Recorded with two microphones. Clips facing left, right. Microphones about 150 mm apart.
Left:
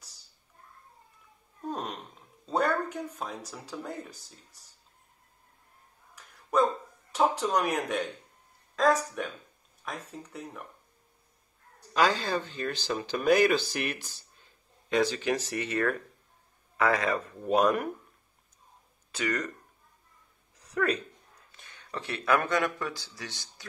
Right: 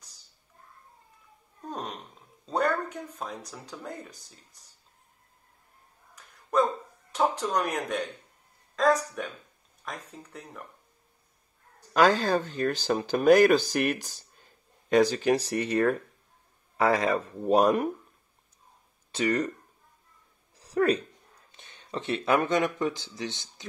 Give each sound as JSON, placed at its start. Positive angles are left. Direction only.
{"t": 1.7, "sound": "a sound", "side_deg": 0}
{"t": 2.4, "sound": "speech", "side_deg": 5}
{"t": 6.1, "sound": "dog", "side_deg": 0}
{"t": 7.3, "sound": "speech", "side_deg": 10}
{"t": 11.9, "sound": "speech", "side_deg": -50}
{"t": 19.1, "sound": "speech", "side_deg": -30}
{"t": 20.5, "sound": "a sound", "side_deg": -35}
{"t": 21.5, "sound": "speech", "side_deg": -25}